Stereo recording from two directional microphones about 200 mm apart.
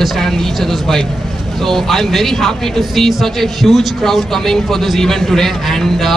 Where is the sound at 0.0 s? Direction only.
Centre (ahead or behind).